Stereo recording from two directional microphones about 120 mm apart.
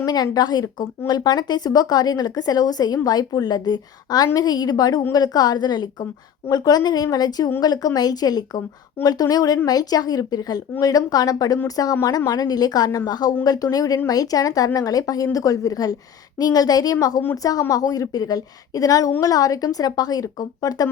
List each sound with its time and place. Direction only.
0.0 s speech: 35° left (ahead or behind)